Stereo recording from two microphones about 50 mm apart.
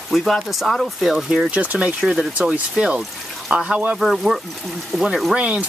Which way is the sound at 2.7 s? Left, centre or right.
Right.